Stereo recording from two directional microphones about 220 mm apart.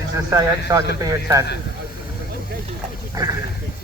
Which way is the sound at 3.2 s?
15° right (ahead or behind).